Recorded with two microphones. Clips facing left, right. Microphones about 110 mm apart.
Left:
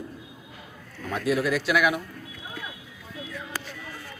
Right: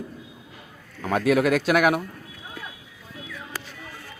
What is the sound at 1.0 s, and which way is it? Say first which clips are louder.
Speech: right 5 dB; 70° right (ahead or behind).